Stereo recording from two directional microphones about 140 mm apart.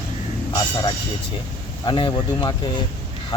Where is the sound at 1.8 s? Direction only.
35° left (ahead or behind).